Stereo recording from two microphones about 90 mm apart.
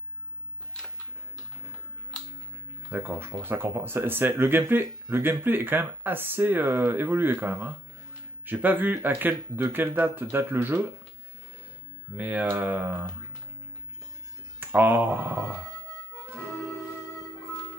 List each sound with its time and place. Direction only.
2.9 s speech: 25° right (ahead or behind)
12.2 s speech: 20° right (ahead or behind)
14.6 s speech: 20° right (ahead or behind)